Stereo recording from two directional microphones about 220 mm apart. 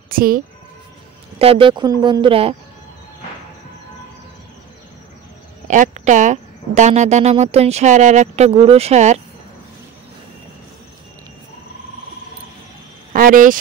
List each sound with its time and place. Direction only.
0.1 s speech: 40° right (ahead or behind)
1.4 s speech: 25° right (ahead or behind)
5.7 s speech: 35° right (ahead or behind)
13.1 s cricket: 40° right (ahead or behind)